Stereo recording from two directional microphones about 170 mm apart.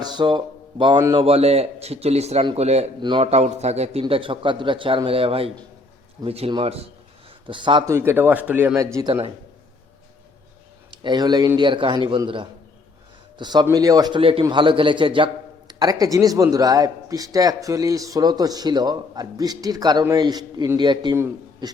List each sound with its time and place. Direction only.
0.0 s speech: 25° right (ahead or behind)
0.9 s speech: 15° right (ahead or behind)
1.2 s a man's voice: 35° right (ahead or behind)
7.9 s speech: 15° right (ahead or behind)
11.0 s a man's voice: 25° right (ahead or behind)
21.2 s a man's voice: 15° right (ahead or behind)